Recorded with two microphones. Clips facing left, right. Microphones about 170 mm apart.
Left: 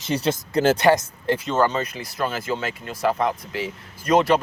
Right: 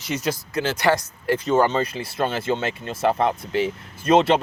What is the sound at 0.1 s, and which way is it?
Speech, 30° left (ahead or behind).